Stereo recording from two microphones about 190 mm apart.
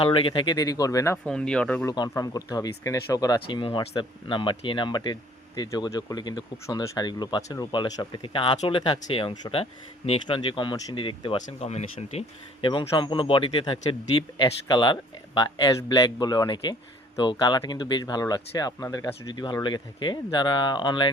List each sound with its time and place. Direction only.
0.0 s speech: 30° left (ahead or behind); by 1.9 s 5° left (ahead or behind)
1.9 s speech: 20° left (ahead or behind)